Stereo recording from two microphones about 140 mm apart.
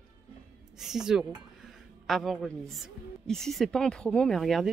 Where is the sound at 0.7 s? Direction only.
5° right (ahead or behind).